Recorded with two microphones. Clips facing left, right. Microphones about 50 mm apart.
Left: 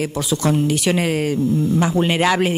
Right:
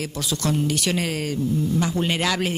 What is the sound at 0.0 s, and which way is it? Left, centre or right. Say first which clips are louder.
Speech: left 6 dB; centre.